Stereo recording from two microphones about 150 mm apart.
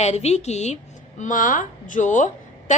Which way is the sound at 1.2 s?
60° left (ahead or behind).